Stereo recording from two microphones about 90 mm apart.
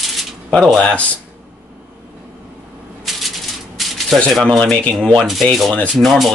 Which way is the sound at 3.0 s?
Centre (ahead or behind).